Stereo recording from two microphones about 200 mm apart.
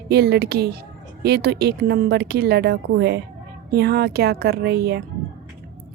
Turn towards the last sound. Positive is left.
turn(degrees=-55)  # may be behind; listen again after turning